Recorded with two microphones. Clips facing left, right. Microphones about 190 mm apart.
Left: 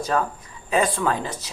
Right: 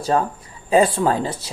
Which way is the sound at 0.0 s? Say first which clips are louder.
Right 4 dB; 30° right (ahead or behind).